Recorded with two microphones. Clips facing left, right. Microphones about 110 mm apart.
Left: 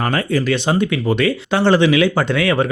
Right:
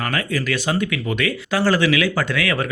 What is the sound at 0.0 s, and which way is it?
Speech, 30° left (ahead or behind).